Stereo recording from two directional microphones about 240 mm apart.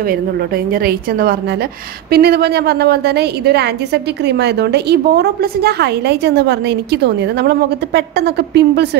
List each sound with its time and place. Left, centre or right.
0.7 s a woman's voice: right